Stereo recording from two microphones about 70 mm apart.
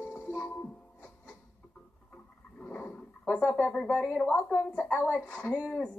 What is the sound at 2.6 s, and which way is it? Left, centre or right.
Dog, left.